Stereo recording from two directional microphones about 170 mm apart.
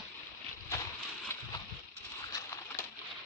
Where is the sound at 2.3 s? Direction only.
20° left (ahead or behind).